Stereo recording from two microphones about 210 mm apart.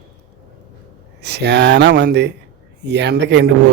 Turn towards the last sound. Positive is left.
turn(degrees=-55)  # may be behind; listen again after turning